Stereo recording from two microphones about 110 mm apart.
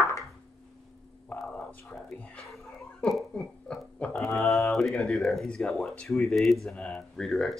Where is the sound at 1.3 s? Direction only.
Centre (ahead or behind).